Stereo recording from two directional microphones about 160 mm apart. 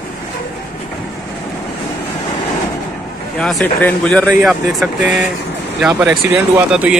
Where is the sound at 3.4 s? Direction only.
5° left (ahead or behind).